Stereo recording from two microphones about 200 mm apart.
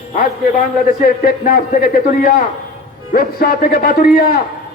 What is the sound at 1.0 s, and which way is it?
A man's voice, 50° left (ahead or behind).